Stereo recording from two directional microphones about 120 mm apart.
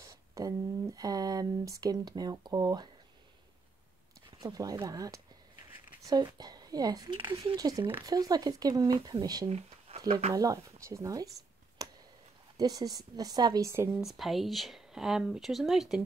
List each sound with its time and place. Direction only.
0.0 s a sound: 30° right (ahead or behind)
4.4 s speech: 30° right (ahead or behind)
9.5 s a sound: 60° right (ahead or behind)
10.3 s speech: 30° right (ahead or behind)
12.5 s speech: 30° right (ahead or behind)
14.0 s speech: centre (ahead or behind)